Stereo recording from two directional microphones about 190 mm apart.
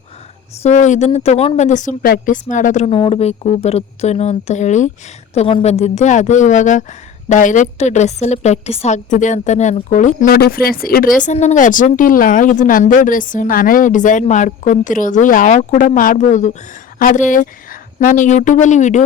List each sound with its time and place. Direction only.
0.6 s a woman's voice: 40° left (ahead or behind)
11.2 s a woman's voice: 40° left (ahead or behind)